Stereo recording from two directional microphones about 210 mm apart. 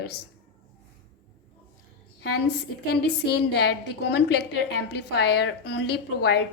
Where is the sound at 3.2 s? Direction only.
50° left (ahead or behind).